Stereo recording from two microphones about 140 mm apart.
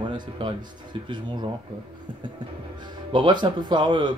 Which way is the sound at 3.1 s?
30° right (ahead or behind).